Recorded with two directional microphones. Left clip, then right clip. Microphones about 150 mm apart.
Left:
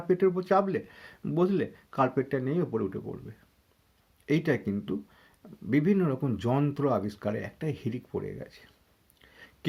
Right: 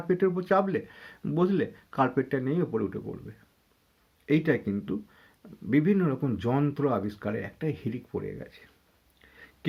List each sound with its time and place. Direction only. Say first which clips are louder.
0.1 s speech: even; 20° left (ahead or behind)
9.2 s chewing: right 1 dB; 35° left (ahead or behind)